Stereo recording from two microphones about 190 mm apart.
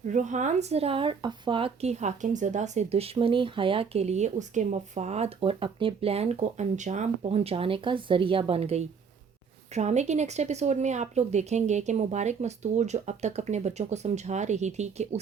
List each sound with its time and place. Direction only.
0.1 s speech: 40° right (ahead or behind)